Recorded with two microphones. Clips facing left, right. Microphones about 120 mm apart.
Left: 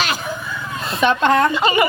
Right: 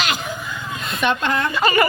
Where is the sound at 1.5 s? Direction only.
20° left (ahead or behind).